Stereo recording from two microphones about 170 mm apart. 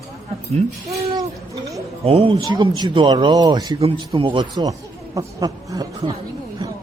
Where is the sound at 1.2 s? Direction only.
20° right (ahead or behind).